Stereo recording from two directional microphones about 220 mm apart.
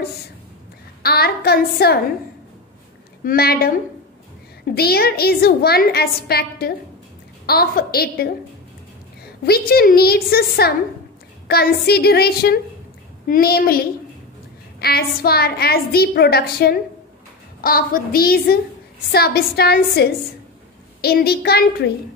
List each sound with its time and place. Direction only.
1.0 s a woman's voice: 45° left (ahead or behind)
3.3 s a woman's voice: 45° left (ahead or behind)
9.5 s a woman's voice: 45° left (ahead or behind)